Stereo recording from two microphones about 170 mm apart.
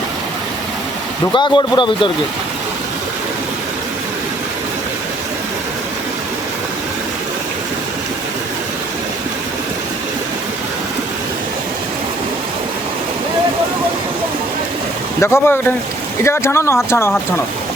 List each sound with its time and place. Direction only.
1.3 s speech: 25° left (ahead or behind)
15.2 s speech: 15° left (ahead or behind)